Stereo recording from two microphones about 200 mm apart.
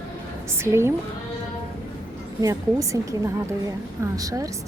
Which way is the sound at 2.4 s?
15° right (ahead or behind).